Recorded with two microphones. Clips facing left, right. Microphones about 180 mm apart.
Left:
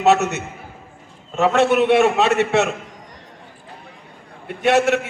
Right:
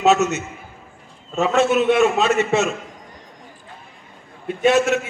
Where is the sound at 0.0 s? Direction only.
65° left (ahead or behind).